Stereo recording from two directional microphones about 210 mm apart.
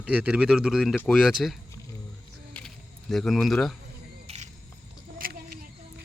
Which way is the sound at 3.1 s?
Centre (ahead or behind).